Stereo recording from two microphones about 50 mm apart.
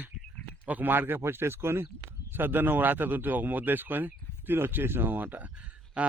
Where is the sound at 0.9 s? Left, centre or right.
Right.